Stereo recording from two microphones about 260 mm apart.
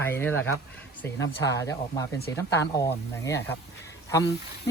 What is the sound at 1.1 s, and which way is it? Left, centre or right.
Speech, left.